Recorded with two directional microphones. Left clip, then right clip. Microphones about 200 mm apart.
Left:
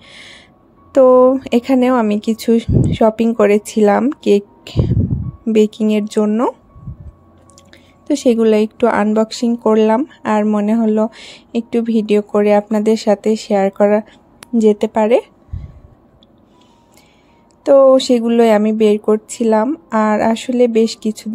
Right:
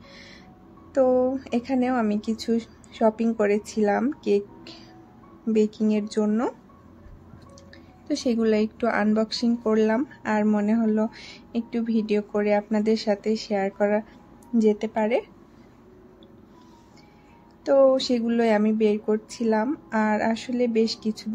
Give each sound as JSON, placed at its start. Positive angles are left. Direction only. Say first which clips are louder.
{"t": 0.0, "sound": "music", "louder": "left 9 dB", "side_deg": 40}
{"t": 0.9, "sound": "speech", "louder": "left 12 dB", "side_deg": 40}
{"t": 7.7, "sound": "a woman's voice", "louder": "left 10 dB", "side_deg": 35}
{"t": 17.6, "sound": "speech", "louder": "left 10 dB", "side_deg": 35}